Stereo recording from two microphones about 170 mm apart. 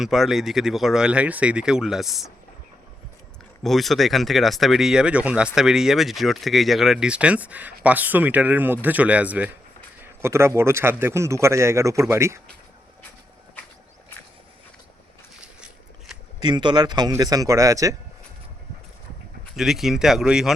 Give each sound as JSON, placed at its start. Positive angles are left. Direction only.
{"t": 0.0, "sound": "speech", "side_deg": 0}
{"t": 3.6, "sound": "speech", "side_deg": 0}
{"t": 15.4, "sound": "shuffling cards", "side_deg": -5}
{"t": 16.4, "sound": "speech", "side_deg": -25}
{"t": 19.5, "sound": "speech", "side_deg": 0}